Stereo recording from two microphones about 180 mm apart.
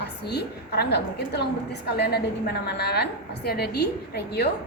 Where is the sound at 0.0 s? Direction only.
65° left (ahead or behind).